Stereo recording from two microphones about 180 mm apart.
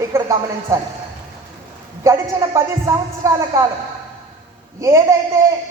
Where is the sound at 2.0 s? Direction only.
15° right (ahead or behind).